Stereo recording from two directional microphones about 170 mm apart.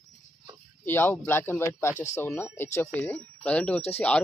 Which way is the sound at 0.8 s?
15° left (ahead or behind).